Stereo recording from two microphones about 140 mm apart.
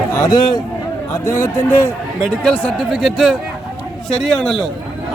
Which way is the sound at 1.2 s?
20° left (ahead or behind).